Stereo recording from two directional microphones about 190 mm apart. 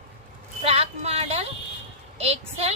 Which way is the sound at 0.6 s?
30° right (ahead or behind).